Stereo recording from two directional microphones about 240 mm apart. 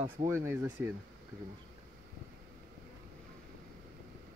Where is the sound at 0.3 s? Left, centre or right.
Centre.